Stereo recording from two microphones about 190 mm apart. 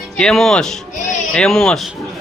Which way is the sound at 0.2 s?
Centre (ahead or behind).